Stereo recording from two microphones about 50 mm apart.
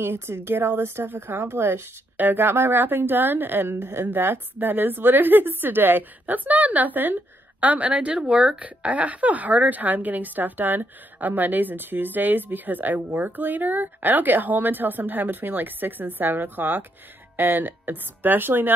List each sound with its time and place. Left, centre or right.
0.0 s a woman's voice: right
8.3 s speech: centre
8.5 s a woman's voice: right